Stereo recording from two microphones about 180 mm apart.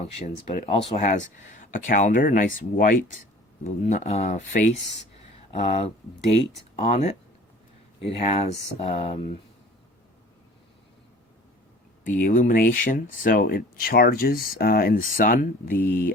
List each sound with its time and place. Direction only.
0.0 s speech: 35° left (ahead or behind)
12.1 s speech: 50° left (ahead or behind)